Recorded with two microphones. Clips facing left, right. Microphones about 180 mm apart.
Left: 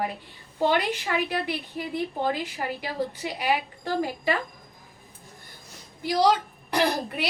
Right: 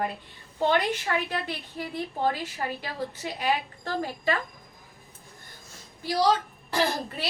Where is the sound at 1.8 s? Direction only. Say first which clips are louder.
Even; 15° left (ahead or behind).